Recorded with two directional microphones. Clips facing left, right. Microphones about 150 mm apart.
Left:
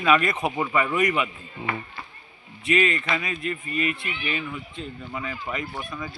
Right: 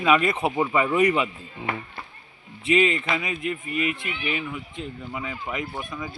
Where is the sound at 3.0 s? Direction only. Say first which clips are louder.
Right 1 dB; 10° right (ahead or behind).